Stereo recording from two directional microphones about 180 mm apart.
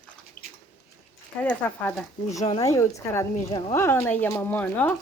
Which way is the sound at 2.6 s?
15° left (ahead or behind).